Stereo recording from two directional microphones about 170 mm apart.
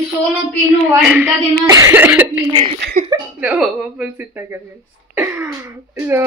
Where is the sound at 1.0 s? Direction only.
5° right (ahead or behind).